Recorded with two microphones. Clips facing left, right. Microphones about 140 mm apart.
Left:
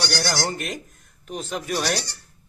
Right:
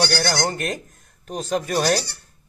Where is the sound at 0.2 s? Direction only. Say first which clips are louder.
Right 3 dB; 40° right (ahead or behind).